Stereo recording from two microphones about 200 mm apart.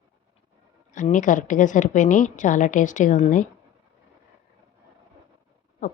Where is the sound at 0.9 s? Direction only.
40° left (ahead or behind).